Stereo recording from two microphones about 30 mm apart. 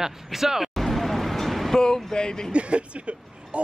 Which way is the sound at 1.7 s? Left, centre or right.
Left.